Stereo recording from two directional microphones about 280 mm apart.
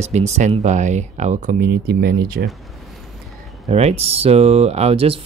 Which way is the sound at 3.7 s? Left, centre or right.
Right.